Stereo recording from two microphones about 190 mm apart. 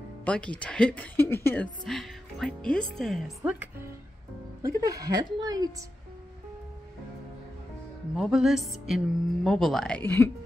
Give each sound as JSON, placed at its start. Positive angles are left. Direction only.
{"t": 0.2, "sound": "speech", "side_deg": 5}
{"t": 4.6, "sound": "a woman's voice", "side_deg": -15}
{"t": 8.2, "sound": "speech", "side_deg": 0}